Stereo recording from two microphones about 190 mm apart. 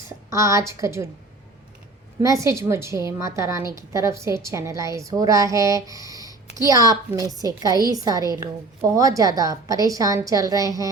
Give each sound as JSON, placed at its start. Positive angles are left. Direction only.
{"t": 0.3, "sound": "a woman's voice", "side_deg": -15}
{"t": 2.2, "sound": "a woman's voice", "side_deg": -15}